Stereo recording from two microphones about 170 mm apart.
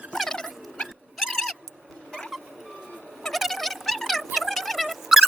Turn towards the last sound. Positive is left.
turn(degrees=0)  # may be behind; listen again after turning